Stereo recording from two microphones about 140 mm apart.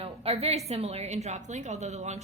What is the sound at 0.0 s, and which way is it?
A woman's voice, 45° right (ahead or behind).